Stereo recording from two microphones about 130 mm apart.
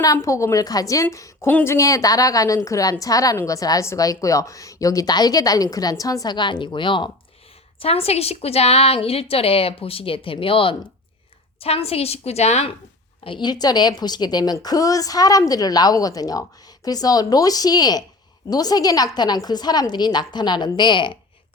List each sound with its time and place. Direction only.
0.0 s a woman's voice: 25° left (ahead or behind)
7.8 s a woman's voice: 50° left (ahead or behind)
13.2 s a woman's voice: 35° left (ahead or behind)